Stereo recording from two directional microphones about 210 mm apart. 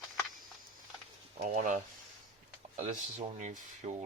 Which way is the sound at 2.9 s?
35° right (ahead or behind).